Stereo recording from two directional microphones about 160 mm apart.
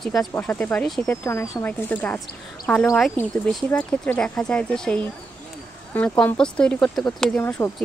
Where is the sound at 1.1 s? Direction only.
15° left (ahead or behind).